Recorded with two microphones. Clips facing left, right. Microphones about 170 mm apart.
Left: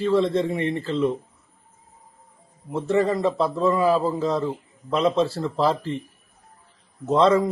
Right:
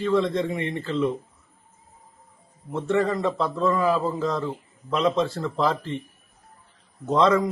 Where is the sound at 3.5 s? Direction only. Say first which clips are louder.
Left 1 dB; 35° left (ahead or behind).